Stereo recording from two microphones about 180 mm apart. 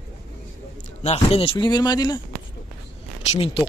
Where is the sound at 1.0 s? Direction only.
35° left (ahead or behind).